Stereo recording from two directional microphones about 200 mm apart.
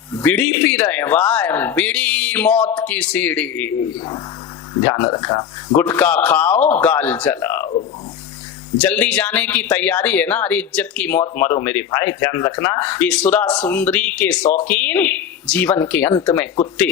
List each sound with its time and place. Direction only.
0.1 s a man's voice: 10° left (ahead or behind)
4.9 s speech: 20° left (ahead or behind)
5.7 s a man's voice: 10° left (ahead or behind)
8.8 s a man's voice: 5° left (ahead or behind)